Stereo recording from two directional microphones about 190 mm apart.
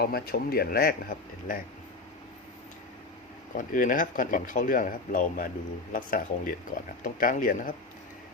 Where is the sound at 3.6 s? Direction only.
45° left (ahead or behind).